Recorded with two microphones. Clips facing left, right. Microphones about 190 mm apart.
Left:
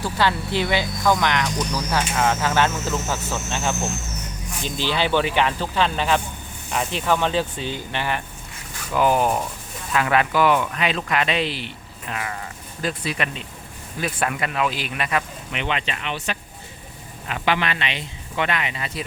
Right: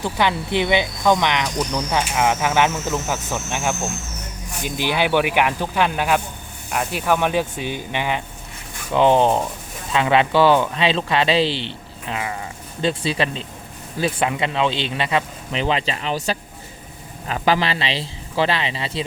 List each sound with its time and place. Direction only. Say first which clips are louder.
0.0 s speech: right 1 dB; 20° right (ahead or behind)